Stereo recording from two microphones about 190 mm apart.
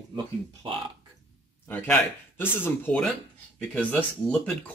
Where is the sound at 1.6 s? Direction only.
10° left (ahead or behind).